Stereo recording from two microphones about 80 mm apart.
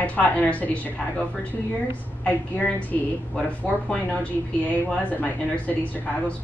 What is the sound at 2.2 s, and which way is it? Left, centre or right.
A woman's voice, centre.